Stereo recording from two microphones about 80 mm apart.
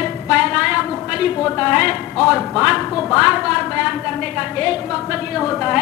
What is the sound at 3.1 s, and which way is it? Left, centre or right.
A woman's voice, centre.